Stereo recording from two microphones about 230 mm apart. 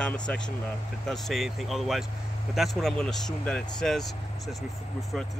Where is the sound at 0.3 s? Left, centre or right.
Centre.